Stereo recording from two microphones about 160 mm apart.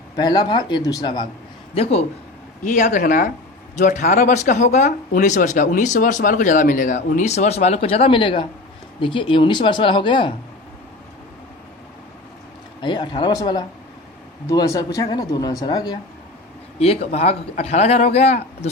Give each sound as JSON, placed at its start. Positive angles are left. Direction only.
{"t": 0.2, "sound": "speech", "side_deg": 25}
{"t": 1.7, "sound": "a man's voice", "side_deg": 40}
{"t": 2.6, "sound": "speech", "side_deg": 50}
{"t": 3.0, "sound": "speech", "side_deg": 65}
{"t": 3.8, "sound": "a man's voice", "side_deg": 50}
{"t": 12.8, "sound": "speech", "side_deg": 30}
{"t": 16.8, "sound": "a man's voice", "side_deg": 40}